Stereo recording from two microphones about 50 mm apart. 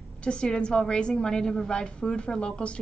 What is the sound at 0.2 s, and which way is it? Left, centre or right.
A woman's voice, left.